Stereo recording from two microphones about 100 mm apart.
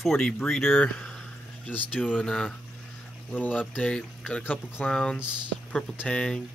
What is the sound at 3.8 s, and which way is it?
Speech, 10° left (ahead or behind).